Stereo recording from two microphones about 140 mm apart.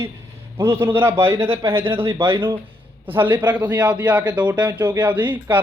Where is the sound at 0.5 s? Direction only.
20° right (ahead or behind).